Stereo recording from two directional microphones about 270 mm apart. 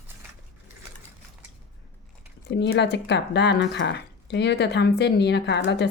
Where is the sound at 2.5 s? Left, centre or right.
Left.